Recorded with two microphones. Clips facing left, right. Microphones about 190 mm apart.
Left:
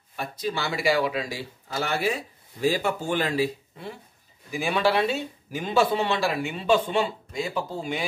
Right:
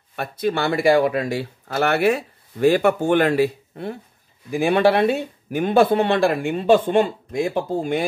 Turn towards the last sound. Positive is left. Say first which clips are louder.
# right 8 dB
turn(degrees=-50)  # may be behind; listen again after turning